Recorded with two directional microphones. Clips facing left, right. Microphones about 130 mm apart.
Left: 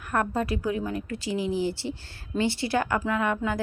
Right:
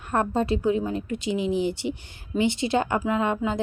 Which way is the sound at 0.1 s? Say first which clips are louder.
Right 3 dB; 25° right (ahead or behind).